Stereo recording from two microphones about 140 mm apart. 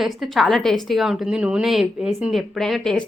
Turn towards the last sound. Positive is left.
turn(degrees=5)  # may be behind; listen again after turning